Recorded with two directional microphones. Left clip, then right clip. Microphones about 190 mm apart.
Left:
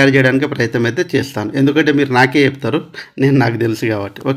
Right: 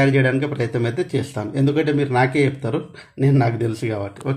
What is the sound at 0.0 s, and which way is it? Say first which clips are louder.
Speech: left 7 dB; 15° left (ahead or behind).